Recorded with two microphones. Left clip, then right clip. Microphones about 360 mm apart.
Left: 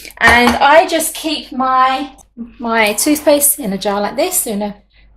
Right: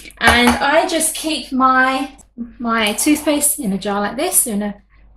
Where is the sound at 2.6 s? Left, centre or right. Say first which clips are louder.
Left 3 dB; centre.